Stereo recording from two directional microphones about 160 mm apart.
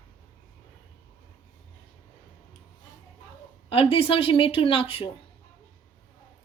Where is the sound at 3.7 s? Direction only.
35° left (ahead or behind).